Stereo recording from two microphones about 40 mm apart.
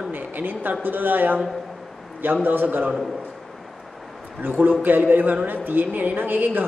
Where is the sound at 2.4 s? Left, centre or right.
Right.